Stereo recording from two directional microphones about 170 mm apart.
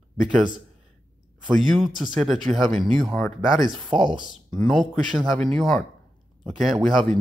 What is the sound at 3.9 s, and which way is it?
Speech, 25° right (ahead or behind).